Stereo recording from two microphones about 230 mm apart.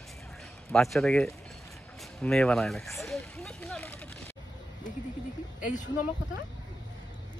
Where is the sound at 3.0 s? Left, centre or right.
Centre.